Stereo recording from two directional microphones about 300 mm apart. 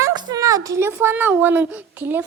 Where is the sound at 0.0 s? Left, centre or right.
Centre.